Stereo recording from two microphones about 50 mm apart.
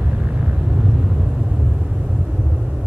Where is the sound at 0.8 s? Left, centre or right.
Centre.